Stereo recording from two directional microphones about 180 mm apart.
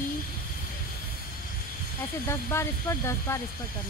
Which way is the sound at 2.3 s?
15° left (ahead or behind).